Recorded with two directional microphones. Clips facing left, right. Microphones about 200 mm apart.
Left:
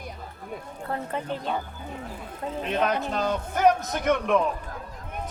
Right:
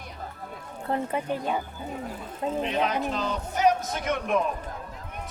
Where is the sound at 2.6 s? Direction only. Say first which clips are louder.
Left 5 dB; 50° left (ahead or behind).